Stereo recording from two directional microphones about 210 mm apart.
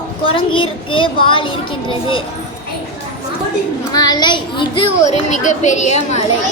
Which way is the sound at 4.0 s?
20° left (ahead or behind).